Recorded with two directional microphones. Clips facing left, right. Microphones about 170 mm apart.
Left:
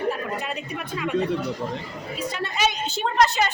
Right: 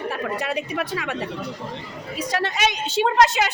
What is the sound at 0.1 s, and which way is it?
A woman's voice, 90° right.